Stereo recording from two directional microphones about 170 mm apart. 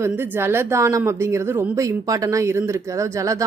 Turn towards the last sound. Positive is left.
turn(degrees=-20)  # may be behind; listen again after turning